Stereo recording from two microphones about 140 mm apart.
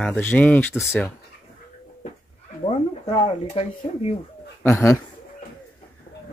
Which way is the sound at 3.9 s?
45° left (ahead or behind).